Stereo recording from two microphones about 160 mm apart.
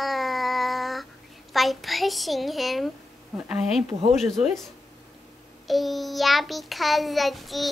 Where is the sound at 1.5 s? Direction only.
Centre (ahead or behind).